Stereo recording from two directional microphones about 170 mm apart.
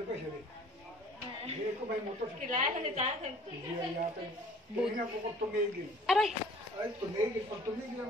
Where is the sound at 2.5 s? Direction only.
50° right (ahead or behind).